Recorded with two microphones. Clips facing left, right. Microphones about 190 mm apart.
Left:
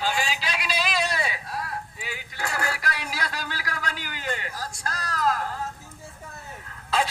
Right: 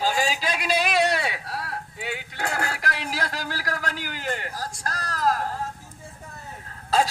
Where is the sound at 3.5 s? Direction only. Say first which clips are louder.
Right 3 dB; 45° right (ahead or behind).